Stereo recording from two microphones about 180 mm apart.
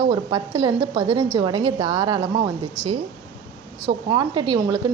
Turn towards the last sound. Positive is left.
turn(degrees=-25)  # may be behind; listen again after turning